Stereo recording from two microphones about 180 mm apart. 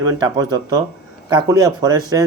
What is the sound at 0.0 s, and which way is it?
A man's voice, 20° right (ahead or behind).